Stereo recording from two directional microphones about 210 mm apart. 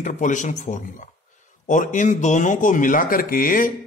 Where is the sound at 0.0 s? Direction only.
35° left (ahead or behind).